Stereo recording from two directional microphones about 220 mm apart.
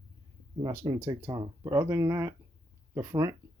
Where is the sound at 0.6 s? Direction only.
15° right (ahead or behind).